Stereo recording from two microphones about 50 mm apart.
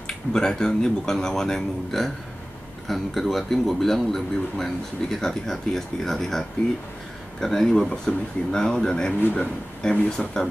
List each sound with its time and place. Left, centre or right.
0.0 s speech: centre
9.3 s speech: left
10.0 s speech: centre